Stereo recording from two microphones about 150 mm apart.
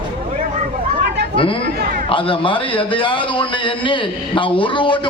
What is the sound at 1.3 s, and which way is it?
A man's voice, 35° left (ahead or behind).